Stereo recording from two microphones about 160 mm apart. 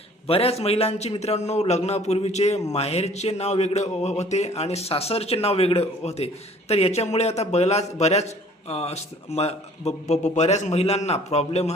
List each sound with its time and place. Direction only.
0.3 s speech: 35° left (ahead or behind)